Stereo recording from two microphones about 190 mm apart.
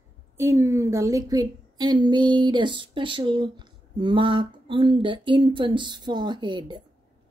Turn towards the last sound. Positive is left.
turn(degrees=-25)  # may be behind; listen again after turning